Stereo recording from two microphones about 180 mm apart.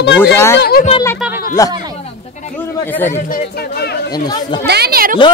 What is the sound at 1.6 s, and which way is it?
Speech, 20° left (ahead or behind).